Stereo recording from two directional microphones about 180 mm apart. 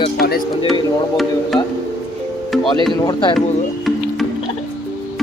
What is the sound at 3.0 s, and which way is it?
Speech, 25° left (ahead or behind).